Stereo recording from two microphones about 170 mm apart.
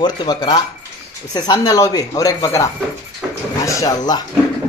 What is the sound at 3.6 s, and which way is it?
Speech, 20° left (ahead or behind).